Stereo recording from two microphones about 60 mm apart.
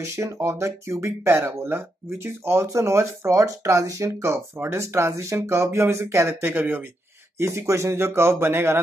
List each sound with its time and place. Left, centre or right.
0.0 s speech: right
6.4 s speech: right
7.3 s speech: right